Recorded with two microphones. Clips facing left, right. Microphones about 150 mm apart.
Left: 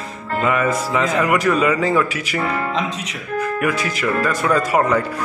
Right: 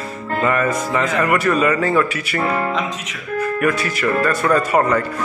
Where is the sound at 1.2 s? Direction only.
10° left (ahead or behind).